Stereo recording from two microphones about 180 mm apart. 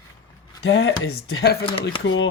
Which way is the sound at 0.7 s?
80° left.